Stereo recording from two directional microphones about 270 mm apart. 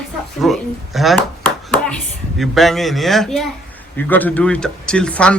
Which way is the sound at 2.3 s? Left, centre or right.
Centre.